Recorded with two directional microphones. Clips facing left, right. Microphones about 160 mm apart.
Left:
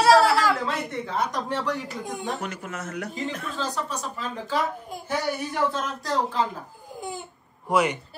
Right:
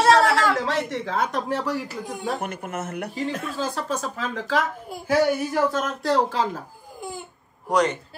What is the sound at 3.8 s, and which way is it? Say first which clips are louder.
A woman's voice: right 4 dB; 90° right.